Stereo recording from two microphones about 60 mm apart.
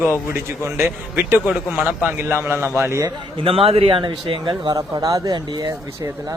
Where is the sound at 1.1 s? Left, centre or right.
Right.